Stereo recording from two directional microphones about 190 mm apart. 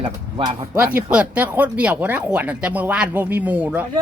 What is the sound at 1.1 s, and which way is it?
Speech, 5° right (ahead or behind).